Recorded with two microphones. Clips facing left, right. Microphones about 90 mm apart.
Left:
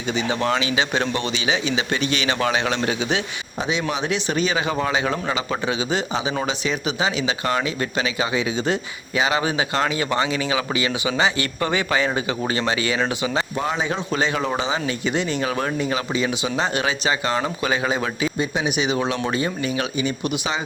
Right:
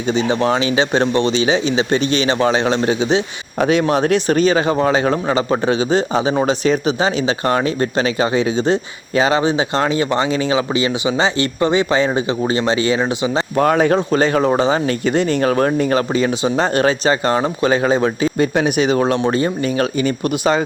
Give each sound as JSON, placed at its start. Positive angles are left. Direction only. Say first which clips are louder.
{"t": 0.1, "sound": "speech", "louder": "right 5 dB", "side_deg": -30}
{"t": 3.6, "sound": "speech", "louder": "right 9 dB", "side_deg": -50}
{"t": 13.6, "sound": "speech", "louder": "right 14 dB", "side_deg": -55}
{"t": 14.1, "sound": "speech", "louder": "right 8 dB", "side_deg": -40}
{"t": 17.3, "sound": "speech", "louder": "right 6 dB", "side_deg": -30}
{"t": 18.3, "sound": "speech", "louder": "right 7 dB", "side_deg": -50}